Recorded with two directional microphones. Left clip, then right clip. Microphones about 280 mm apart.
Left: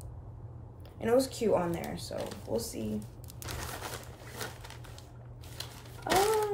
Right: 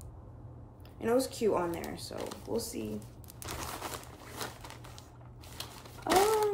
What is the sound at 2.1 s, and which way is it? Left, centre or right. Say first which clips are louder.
Speech: left 3 dB; right.